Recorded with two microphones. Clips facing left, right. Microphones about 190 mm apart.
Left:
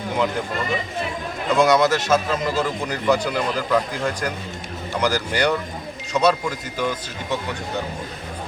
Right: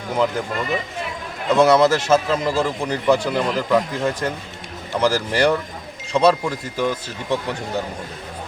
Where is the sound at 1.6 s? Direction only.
30° right (ahead or behind).